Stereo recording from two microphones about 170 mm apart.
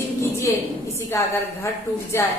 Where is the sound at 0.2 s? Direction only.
15° left (ahead or behind).